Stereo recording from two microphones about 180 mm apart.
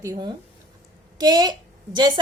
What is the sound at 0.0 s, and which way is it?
A woman's voice, 20° right (ahead or behind).